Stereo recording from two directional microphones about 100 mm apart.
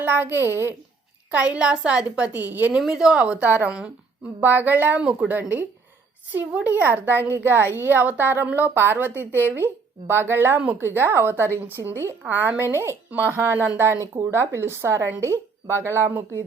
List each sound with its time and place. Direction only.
0.0 s speech: 20° right (ahead or behind)
1.3 s a woman's voice: 10° right (ahead or behind)
2.8 s a woman's voice: 5° right (ahead or behind); by 16.2 s 25° right (ahead or behind)